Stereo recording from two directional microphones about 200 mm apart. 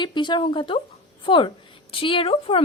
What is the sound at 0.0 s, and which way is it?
A woman's voice, 20° left (ahead or behind).